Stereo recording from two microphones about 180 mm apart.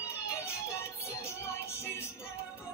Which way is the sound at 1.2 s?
15° left (ahead or behind).